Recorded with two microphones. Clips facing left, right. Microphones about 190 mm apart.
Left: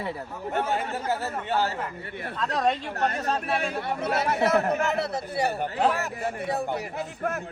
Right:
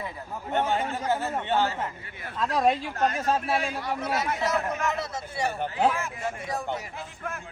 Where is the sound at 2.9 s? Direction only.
65° left (ahead or behind).